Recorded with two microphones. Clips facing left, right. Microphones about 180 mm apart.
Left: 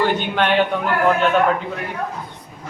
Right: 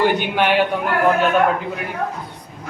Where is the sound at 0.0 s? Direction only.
10° right (ahead or behind).